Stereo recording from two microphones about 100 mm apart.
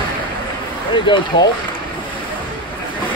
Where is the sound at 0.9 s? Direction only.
50° left (ahead or behind).